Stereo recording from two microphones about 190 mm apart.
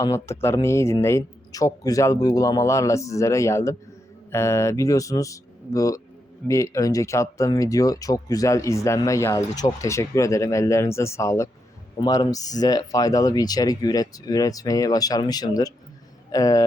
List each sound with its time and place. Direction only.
0.0 s speech: 15° left (ahead or behind)